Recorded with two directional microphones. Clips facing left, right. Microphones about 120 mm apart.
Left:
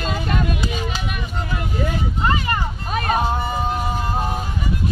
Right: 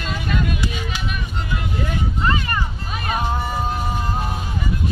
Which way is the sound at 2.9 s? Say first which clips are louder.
Left 5 dB; 40° left (ahead or behind).